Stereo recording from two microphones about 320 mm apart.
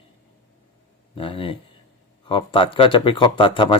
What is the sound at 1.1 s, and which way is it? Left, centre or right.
Speech, centre.